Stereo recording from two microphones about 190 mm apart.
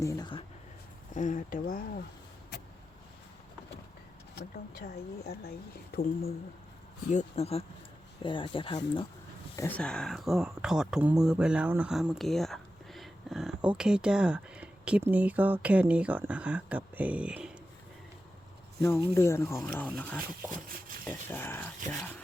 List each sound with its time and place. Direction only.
0.0 s speech: 20° left (ahead or behind)
1.1 s speech: 40° left (ahead or behind)
4.4 s speech: 55° left (ahead or behind)
7.1 s speech: 35° left (ahead or behind)
9.6 s speech: 10° left (ahead or behind)
18.8 s speech: 15° left (ahead or behind)
19.7 s speech: 5° left (ahead or behind)